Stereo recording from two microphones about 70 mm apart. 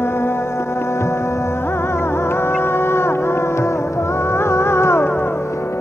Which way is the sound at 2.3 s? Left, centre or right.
Left.